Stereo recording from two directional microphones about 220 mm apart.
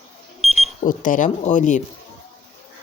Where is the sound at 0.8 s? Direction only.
35° left (ahead or behind).